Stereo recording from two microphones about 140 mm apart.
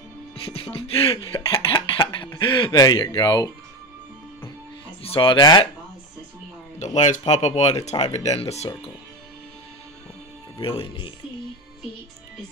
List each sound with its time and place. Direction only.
0.5 s cough: 45° left (ahead or behind)
5.1 s cough: 35° left (ahead or behind)
6.8 s speech: 55° left (ahead or behind)
10.6 s cough: 40° left (ahead or behind)